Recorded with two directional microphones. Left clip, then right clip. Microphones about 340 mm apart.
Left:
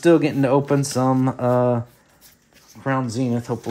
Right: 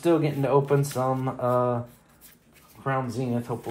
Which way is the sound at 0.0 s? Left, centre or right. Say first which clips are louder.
Left 7 dB; left.